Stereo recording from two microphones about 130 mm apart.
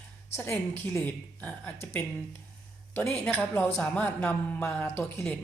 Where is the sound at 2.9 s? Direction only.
15° left (ahead or behind).